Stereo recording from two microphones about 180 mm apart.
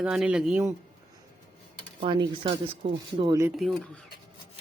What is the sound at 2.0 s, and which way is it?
Speech, 25° right (ahead or behind).